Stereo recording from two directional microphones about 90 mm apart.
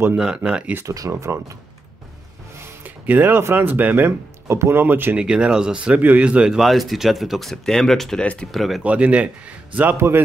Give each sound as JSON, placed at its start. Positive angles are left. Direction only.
{"t": 0.2, "sound": "speech", "side_deg": -10}
{"t": 0.8, "sound": "speech", "side_deg": -40}
{"t": 2.6, "sound": "speech", "side_deg": -20}
{"t": 5.2, "sound": "speech", "side_deg": -10}
{"t": 8.8, "sound": "speech", "side_deg": -15}
{"t": 9.8, "sound": "a man's voice", "side_deg": -25}